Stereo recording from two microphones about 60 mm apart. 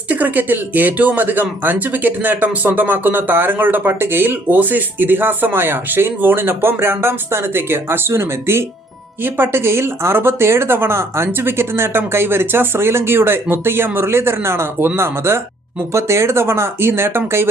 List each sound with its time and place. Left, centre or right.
0.1 s speech: right